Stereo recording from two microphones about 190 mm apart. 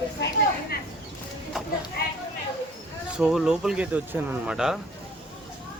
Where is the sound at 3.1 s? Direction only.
5° right (ahead or behind).